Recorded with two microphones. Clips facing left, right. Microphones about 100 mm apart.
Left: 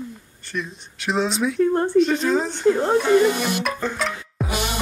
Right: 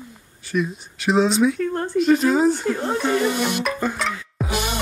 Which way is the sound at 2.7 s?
20° left (ahead or behind).